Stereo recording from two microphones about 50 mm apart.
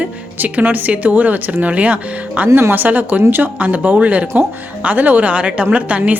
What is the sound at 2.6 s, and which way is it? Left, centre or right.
Speech, right.